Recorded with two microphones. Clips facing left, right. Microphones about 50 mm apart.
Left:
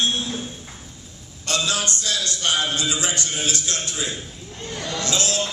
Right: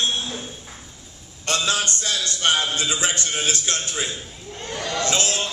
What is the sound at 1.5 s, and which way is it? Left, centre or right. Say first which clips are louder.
Mantra: right 1 dB; right.